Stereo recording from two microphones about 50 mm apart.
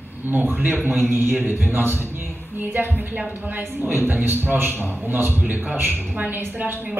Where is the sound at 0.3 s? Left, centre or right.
Right.